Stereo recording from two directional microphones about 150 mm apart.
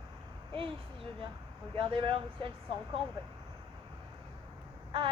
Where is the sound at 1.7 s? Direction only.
35° right (ahead or behind).